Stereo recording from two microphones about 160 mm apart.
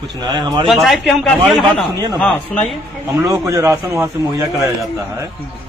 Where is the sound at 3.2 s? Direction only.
20° right (ahead or behind).